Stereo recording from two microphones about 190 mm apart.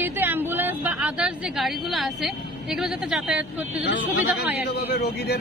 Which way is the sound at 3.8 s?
65° left (ahead or behind).